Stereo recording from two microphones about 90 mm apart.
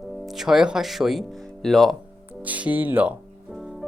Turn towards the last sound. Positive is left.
turn(degrees=-20)  # may be behind; listen again after turning